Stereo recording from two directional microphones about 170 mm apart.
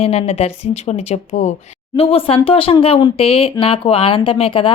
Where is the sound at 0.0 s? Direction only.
35° left (ahead or behind).